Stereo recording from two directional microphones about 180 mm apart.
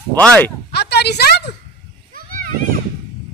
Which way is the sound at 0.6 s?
65° left (ahead or behind).